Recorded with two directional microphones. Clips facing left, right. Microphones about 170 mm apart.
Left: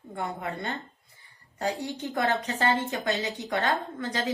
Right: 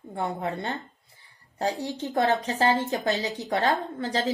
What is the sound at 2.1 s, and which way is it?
A woman's voice, 35° right (ahead or behind).